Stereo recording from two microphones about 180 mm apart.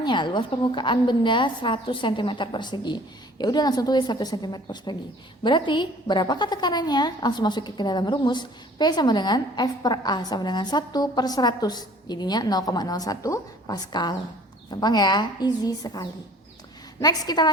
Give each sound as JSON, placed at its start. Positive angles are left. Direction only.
{"t": 0.0, "sound": "a woman's voice", "side_deg": 25}